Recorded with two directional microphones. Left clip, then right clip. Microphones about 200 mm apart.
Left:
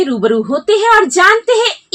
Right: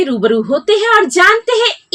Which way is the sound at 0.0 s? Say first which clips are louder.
Even; 25° right (ahead or behind).